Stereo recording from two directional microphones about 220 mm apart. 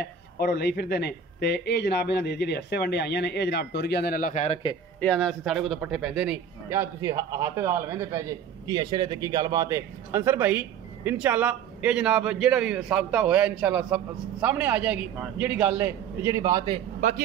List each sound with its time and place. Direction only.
0.0 s speech: 50° left (ahead or behind); by 4.6 s 30° left (ahead or behind)
5.0 s a man's voice: 5° left (ahead or behind); by 16.8 s 20° right (ahead or behind)